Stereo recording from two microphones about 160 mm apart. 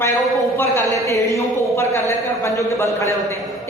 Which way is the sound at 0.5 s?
15° left (ahead or behind).